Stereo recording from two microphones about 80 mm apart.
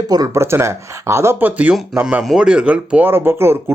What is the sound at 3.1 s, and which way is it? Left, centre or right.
Speech, right.